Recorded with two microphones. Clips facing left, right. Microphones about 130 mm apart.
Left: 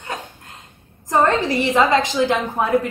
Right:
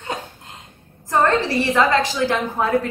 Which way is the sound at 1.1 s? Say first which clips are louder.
Left 1 dB; 15° left (ahead or behind).